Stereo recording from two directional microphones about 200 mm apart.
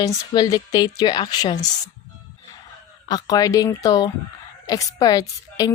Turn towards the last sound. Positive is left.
turn(degrees=20)  # may be behind; listen again after turning